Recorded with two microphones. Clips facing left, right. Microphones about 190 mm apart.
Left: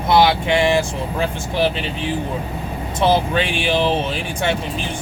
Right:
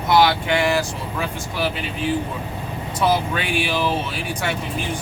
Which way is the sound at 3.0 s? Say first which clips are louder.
Left 4 dB; 25° left (ahead or behind).